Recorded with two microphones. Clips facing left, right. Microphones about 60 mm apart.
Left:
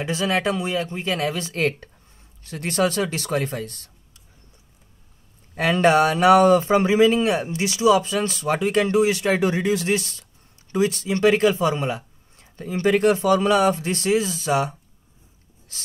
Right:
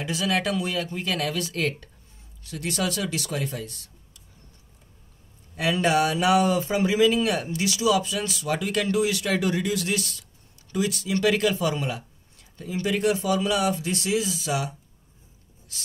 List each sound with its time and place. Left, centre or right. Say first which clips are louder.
0.0 s speech: left 3 dB; left
5.5 s speech: left 5 dB; left